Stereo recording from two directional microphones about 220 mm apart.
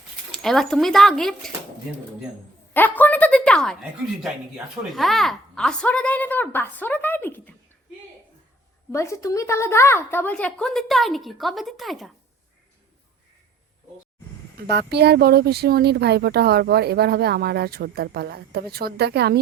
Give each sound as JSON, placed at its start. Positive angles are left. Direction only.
{"t": 0.3, "sound": "a woman's voice", "side_deg": 0}
{"t": 2.7, "sound": "speech", "side_deg": 10}
{"t": 8.9, "sound": "a woman's voice", "side_deg": 15}
{"t": 14.7, "sound": "speech", "side_deg": -50}